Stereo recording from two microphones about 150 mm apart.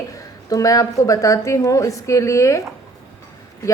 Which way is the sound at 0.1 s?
20° left (ahead or behind).